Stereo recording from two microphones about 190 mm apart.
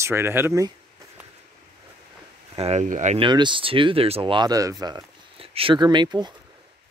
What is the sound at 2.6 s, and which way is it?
Speech, 35° right (ahead or behind).